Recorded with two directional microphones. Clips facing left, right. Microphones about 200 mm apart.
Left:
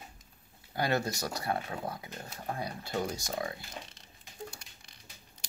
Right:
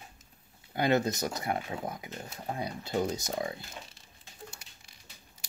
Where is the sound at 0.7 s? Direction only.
20° right (ahead or behind).